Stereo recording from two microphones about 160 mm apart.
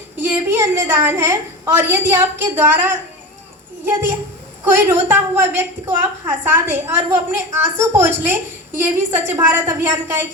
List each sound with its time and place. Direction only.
0.2 s a woman's voice: 15° right (ahead or behind)
4.6 s a woman's voice: 15° right (ahead or behind)